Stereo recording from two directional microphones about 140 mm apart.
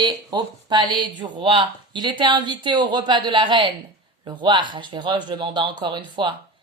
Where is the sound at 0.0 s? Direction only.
30° right (ahead or behind).